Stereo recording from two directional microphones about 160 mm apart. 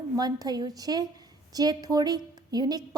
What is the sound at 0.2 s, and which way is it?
A woman's voice, 25° right (ahead or behind).